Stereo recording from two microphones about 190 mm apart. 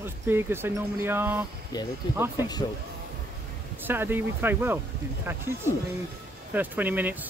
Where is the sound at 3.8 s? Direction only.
10° right (ahead or behind).